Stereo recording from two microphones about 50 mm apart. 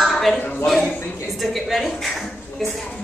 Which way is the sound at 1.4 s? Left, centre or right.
Centre.